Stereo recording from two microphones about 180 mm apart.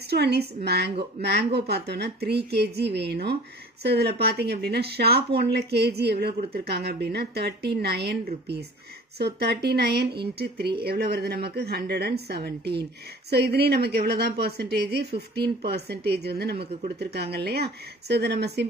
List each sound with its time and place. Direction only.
0.1 s speech: 65° right (ahead or behind)
9.2 s speech: 65° right (ahead or behind)